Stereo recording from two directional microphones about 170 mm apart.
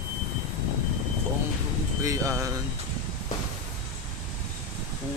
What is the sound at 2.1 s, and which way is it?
Speech, 15° right (ahead or behind).